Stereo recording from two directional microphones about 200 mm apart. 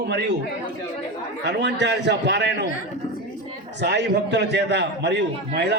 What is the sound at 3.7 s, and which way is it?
A man's voice, 60° right (ahead or behind).